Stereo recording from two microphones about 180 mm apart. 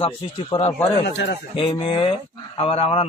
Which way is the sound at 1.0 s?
75° left (ahead or behind).